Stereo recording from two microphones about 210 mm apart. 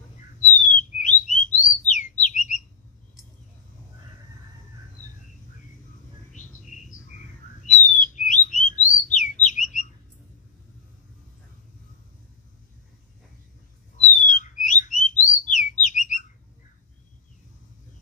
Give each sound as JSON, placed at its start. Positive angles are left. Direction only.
{"t": 0.4, "sound": "bird", "side_deg": 35}
{"t": 6.3, "sound": "squawk", "side_deg": 35}
{"t": 7.6, "sound": "bird", "side_deg": 35}
{"t": 13.9, "sound": "bird", "side_deg": 35}